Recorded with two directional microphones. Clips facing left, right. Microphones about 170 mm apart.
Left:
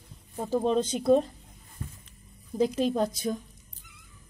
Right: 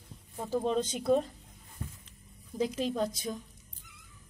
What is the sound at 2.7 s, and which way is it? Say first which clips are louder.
Speech: left 5 dB; 60° left (ahead or behind).